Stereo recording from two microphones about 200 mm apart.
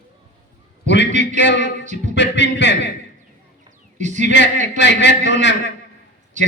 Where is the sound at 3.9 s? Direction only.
35° right (ahead or behind).